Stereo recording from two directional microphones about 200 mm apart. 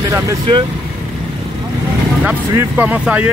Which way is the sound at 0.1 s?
20° right (ahead or behind).